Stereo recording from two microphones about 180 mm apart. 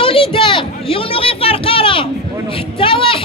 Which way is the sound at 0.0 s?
30° left (ahead or behind).